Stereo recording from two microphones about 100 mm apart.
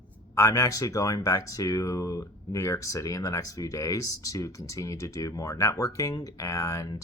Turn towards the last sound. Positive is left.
turn(degrees=35)  # may be behind; listen again after turning